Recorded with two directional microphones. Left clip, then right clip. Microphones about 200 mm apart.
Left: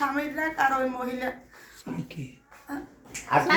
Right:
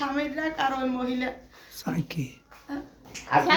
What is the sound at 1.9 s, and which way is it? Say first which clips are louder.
Speech: right 5 dB; 45° right (ahead or behind).